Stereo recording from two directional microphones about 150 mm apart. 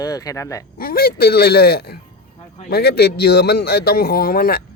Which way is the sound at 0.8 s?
80° left.